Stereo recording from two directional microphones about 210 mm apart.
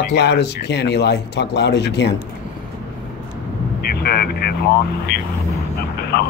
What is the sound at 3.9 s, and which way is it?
Vehicle, 45° left (ahead or behind).